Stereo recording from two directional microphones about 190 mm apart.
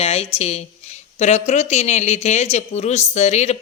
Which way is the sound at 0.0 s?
35° left (ahead or behind).